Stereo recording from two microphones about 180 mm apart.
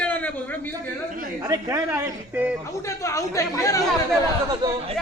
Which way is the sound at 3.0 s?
15° left (ahead or behind).